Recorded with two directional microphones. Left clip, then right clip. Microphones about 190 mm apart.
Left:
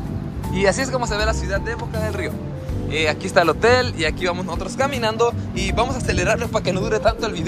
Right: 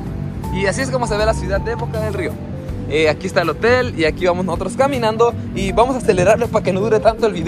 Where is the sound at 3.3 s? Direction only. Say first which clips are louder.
Left 3 dB; 25° left (ahead or behind).